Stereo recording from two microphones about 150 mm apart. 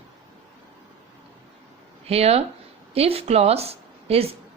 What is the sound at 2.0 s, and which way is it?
A woman's voice, 40° right (ahead or behind).